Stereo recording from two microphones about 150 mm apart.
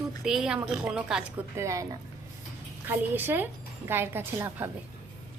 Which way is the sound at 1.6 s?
20° right (ahead or behind).